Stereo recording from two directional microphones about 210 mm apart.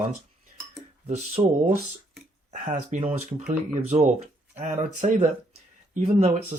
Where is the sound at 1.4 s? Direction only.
20° right (ahead or behind).